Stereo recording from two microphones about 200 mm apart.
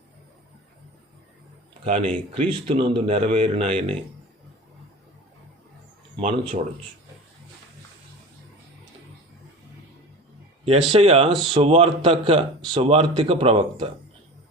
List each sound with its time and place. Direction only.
1.8 s speech: 30° right (ahead or behind)
6.1 s speech: 25° right (ahead or behind)
10.9 s speech: 30° right (ahead or behind)